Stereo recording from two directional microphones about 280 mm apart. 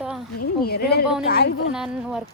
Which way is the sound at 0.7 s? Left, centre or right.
Left.